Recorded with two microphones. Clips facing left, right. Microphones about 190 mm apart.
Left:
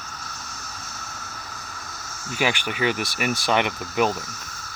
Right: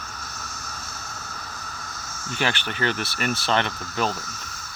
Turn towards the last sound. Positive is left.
turn(degrees=15)  # may be behind; listen again after turning